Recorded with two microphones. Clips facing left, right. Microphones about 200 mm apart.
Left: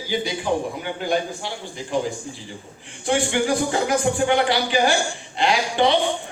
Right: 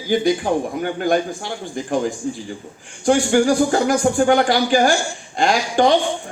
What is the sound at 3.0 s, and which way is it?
A man's voice, 45° right (ahead or behind).